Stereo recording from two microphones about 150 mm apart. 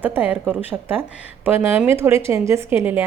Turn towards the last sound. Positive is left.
turn(degrees=-15)  # may be behind; listen again after turning